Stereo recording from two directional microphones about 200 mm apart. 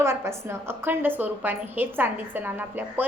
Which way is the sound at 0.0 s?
15° right (ahead or behind).